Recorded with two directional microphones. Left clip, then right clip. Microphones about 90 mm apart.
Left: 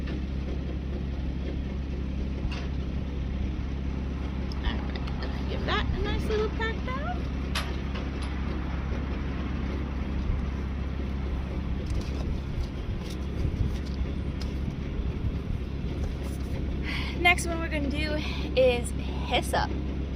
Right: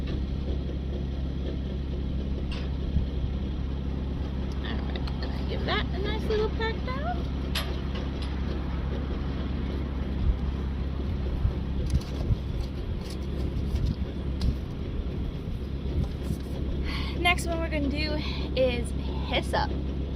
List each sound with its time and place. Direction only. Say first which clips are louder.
5.5 s vehicle: even; 30° left (ahead or behind)
16.9 s a sound: left 2 dB; 50° left (ahead or behind)
19.3 s speech: left 1 dB; 55° left (ahead or behind)